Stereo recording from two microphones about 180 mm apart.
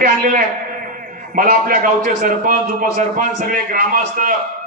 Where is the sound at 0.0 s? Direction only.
50° right (ahead or behind).